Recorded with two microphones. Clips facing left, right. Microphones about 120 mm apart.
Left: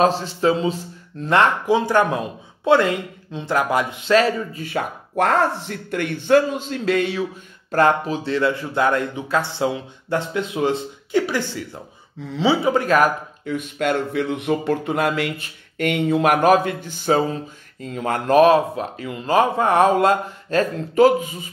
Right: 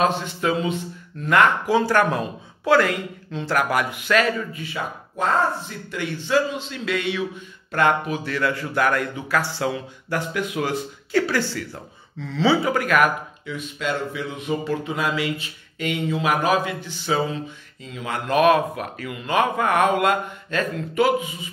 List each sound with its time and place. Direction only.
0.0 s a man's voice: 35° left (ahead or behind)
1.8 s a man's voice: 15° left (ahead or behind)
4.6 s a man's voice: 60° left (ahead or behind); by 13.1 s 30° left (ahead or behind)
13.5 s speech: 55° left (ahead or behind)